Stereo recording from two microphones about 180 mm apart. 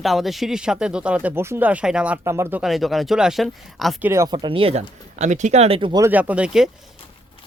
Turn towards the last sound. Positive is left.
turn(degrees=-5)  # may be behind; listen again after turning